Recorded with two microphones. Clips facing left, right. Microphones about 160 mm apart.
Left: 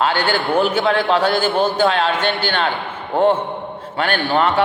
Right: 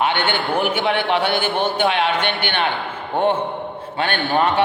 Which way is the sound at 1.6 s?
20° right (ahead or behind).